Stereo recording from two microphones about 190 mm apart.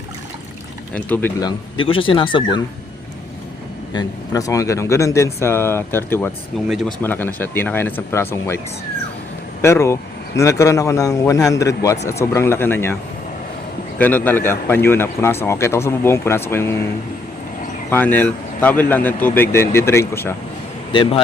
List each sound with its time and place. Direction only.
0.9 s a man's voice: 10° left (ahead or behind)
1.4 s speech: 25° left (ahead or behind)
3.9 s a man's voice: 20° left (ahead or behind)
6.7 s a man's voice: centre (ahead or behind)
14.0 s a man's voice: 10° left (ahead or behind)
17.8 s a man's voice: 10° left (ahead or behind)
20.9 s speech: 25° left (ahead or behind)